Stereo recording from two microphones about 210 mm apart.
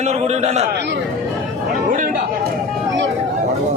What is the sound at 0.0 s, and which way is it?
Speech, 30° right (ahead or behind).